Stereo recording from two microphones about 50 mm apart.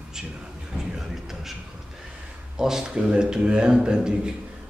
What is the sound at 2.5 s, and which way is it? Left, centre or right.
A man's voice, centre.